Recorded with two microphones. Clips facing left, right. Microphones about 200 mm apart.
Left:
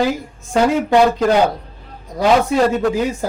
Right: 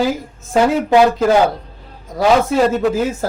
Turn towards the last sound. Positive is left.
turn(degrees=0)  # may be behind; listen again after turning